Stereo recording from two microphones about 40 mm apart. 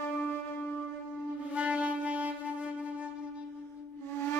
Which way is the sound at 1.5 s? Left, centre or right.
Right.